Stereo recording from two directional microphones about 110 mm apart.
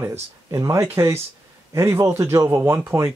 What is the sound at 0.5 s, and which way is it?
Speech, 30° right (ahead or behind).